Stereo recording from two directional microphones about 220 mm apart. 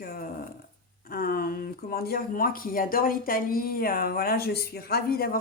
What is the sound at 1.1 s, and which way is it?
Speech, 40° left (ahead or behind).